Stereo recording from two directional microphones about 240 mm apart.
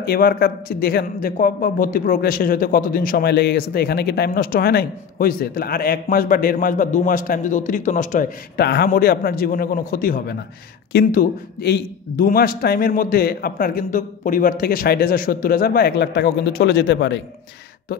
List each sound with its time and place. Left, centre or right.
0.0 s speech: left